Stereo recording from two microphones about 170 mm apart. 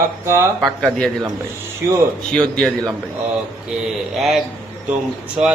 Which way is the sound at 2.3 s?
5° left (ahead or behind).